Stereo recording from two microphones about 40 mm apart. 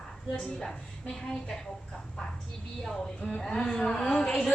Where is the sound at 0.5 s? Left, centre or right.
Centre.